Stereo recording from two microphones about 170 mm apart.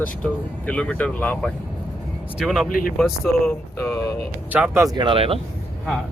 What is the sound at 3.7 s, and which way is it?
Speech, 15° left (ahead or behind).